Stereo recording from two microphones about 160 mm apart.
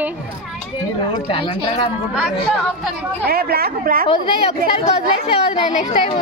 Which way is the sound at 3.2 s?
75° right (ahead or behind).